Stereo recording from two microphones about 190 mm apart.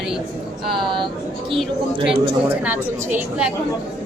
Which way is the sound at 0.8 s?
25° right (ahead or behind).